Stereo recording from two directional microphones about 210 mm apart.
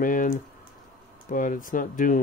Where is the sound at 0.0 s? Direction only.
40° left (ahead or behind).